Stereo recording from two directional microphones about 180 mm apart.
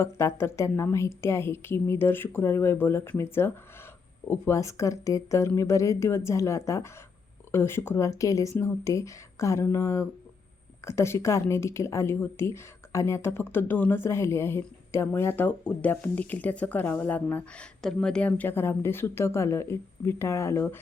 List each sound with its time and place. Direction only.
0.0 s a woman's voice: 15° left (ahead or behind)